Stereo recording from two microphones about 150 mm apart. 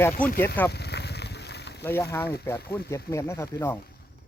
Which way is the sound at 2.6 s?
90° left.